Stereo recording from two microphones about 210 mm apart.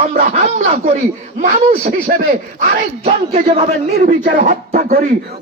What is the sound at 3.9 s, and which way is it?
Speech, 45° right (ahead or behind).